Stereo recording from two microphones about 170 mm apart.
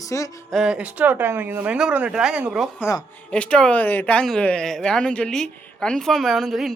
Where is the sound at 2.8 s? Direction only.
10° left (ahead or behind).